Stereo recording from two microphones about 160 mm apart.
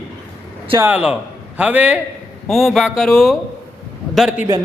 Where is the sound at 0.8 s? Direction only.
10° right (ahead or behind).